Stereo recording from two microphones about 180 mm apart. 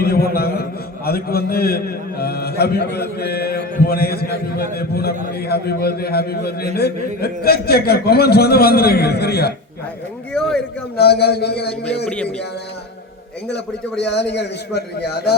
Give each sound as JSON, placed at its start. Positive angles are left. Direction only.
{"t": 0.0, "sound": "a man's voice", "side_deg": 55}
{"t": 10.3, "sound": "speech", "side_deg": 5}
{"t": 10.9, "sound": "a man's voice", "side_deg": 65}
{"t": 12.0, "sound": "speech", "side_deg": 5}
{"t": 14.0, "sound": "a man's voice", "side_deg": 70}